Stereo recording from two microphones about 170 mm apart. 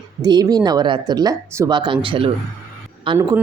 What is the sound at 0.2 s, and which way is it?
A woman's voice, 25° right (ahead or behind).